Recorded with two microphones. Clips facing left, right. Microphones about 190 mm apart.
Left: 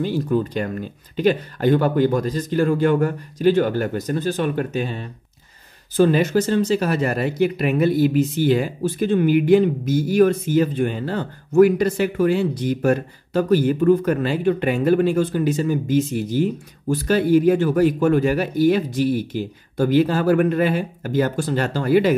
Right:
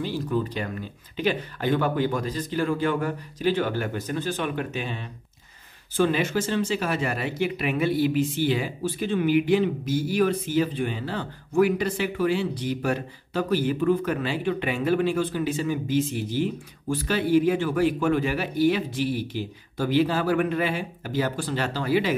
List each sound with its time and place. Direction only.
0.0 s speech: 50° left (ahead or behind)